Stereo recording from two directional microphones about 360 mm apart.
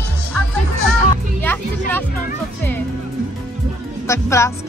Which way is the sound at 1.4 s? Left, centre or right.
Centre.